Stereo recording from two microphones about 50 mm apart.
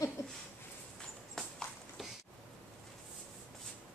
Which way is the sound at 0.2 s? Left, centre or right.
Left.